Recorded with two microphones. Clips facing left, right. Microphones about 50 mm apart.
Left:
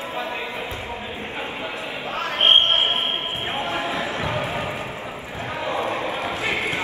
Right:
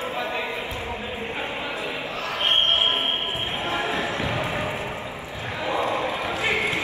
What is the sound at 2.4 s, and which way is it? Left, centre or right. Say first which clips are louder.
Basketball bounce: left 4 dB; left.